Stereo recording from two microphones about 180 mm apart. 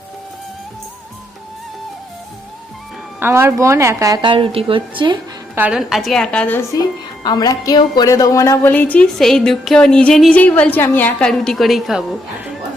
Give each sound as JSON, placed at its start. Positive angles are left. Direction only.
{"t": 3.2, "sound": "a woman's voice", "side_deg": -10}
{"t": 5.5, "sound": "a woman's voice", "side_deg": -5}
{"t": 6.7, "sound": "speech", "side_deg": 20}